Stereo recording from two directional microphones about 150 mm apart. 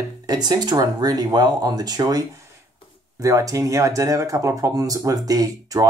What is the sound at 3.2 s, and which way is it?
Speech, 20° right (ahead or behind).